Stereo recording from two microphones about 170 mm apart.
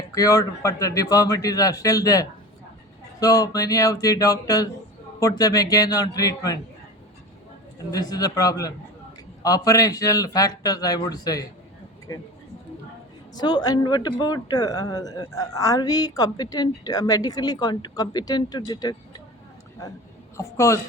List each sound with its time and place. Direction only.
0.1 s speech: 20° left (ahead or behind)
7.9 s speech: 25° left (ahead or behind)
13.3 s speech: 25° left (ahead or behind)
20.3 s a woman's voice: 20° left (ahead or behind)